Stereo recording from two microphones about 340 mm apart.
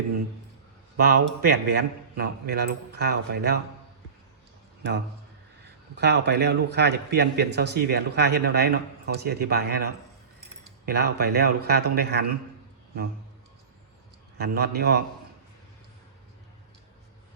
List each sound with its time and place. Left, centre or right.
0.9 s a man's voice: right
6.0 s a man's voice: right
14.3 s a man's voice: right